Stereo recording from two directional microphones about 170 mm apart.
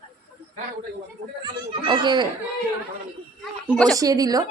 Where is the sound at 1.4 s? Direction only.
25° right (ahead or behind).